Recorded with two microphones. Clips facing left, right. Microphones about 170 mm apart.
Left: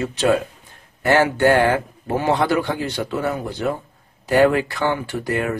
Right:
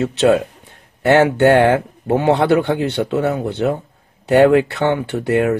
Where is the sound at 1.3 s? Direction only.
65° right (ahead or behind).